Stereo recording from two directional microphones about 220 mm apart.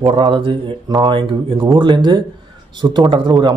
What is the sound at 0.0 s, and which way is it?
A man's voice, 20° right (ahead or behind).